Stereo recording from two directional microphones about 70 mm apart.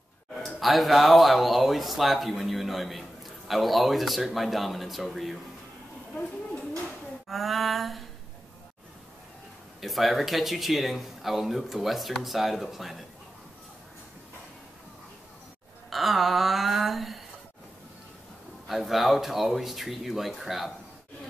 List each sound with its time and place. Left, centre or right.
0.6 s speech: centre
6.1 s a sound: centre
7.2 s speech: centre
9.8 s speech: centre
15.9 s speech: centre
18.7 s speech: centre